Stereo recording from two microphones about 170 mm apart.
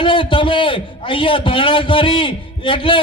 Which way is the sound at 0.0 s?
30° left (ahead or behind).